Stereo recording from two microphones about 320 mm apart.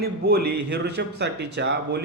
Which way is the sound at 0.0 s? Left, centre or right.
Right.